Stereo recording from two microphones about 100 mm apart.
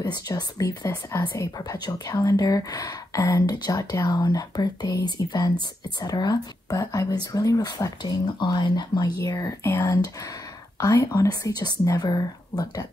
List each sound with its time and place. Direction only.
0.0 s speech: 45° left (ahead or behind)
9.8 s speech: 40° left (ahead or behind)